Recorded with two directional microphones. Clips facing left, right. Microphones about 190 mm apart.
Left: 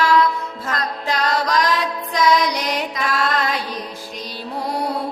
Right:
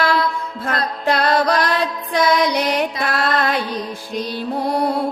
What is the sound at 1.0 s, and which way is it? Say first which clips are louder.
Music: right 5 dB; 60° right (ahead or behind).